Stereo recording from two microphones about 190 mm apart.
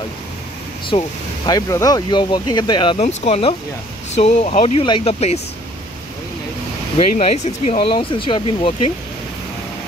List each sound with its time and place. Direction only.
0.8 s speech: 25° left (ahead or behind)
7.0 s speech: 30° left (ahead or behind)